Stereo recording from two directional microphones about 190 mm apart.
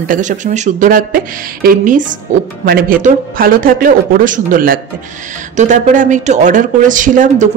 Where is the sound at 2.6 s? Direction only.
50° right (ahead or behind).